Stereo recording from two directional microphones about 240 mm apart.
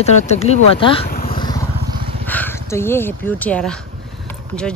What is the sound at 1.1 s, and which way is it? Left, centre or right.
Vehicle, left.